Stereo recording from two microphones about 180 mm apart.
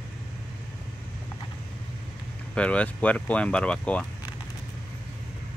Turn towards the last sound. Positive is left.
turn(degrees=5)  # may be behind; listen again after turning